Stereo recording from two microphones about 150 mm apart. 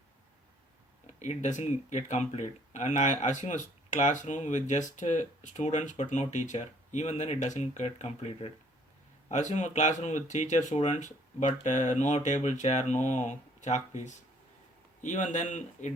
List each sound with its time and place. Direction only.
1.2 s speech: 50° left (ahead or behind)